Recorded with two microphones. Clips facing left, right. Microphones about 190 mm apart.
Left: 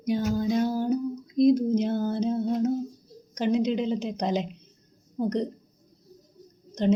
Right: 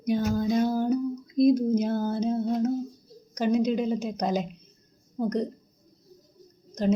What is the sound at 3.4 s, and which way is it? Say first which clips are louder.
Speech: even; 20° left (ahead or behind).